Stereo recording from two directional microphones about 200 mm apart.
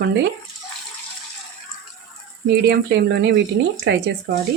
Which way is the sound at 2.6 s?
55° right (ahead or behind).